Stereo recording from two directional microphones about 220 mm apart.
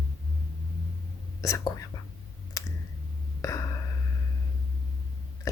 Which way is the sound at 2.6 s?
15° left (ahead or behind).